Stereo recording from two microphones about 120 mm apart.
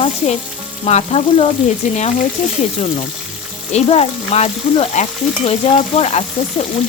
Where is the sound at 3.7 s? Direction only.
60° left (ahead or behind).